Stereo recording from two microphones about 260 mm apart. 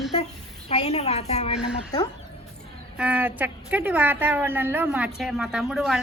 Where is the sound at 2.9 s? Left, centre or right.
Centre.